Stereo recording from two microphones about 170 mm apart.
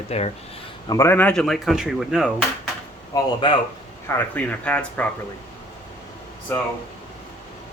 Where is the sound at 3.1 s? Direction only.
30° left (ahead or behind).